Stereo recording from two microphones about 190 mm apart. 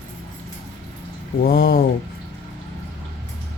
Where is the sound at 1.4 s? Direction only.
50° left (ahead or behind).